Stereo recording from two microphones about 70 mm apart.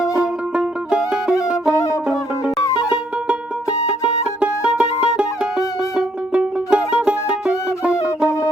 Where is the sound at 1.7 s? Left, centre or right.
Left.